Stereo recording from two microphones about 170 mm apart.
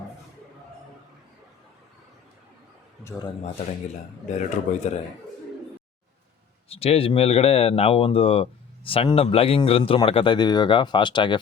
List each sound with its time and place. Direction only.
4.4 s speech: 45° left (ahead or behind)
6.7 s speech: 35° left (ahead or behind)